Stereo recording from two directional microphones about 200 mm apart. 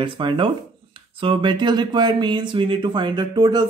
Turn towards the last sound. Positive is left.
turn(degrees=-20)  # may be behind; listen again after turning